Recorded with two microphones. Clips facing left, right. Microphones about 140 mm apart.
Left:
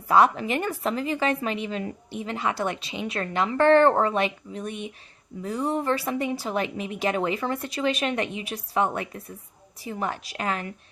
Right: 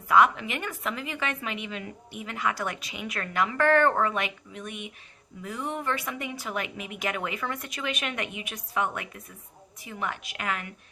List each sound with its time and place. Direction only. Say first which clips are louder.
0.1 s a woman's voice: left 2 dB; 35° left (ahead or behind)